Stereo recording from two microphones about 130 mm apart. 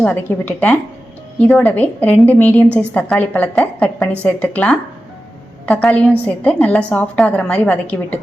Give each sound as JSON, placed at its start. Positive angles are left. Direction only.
{"t": 0.0, "sound": "a woman's voice", "side_deg": 15}